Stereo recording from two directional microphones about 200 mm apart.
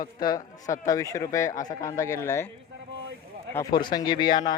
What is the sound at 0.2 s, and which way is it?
A man's voice, 15° left (ahead or behind).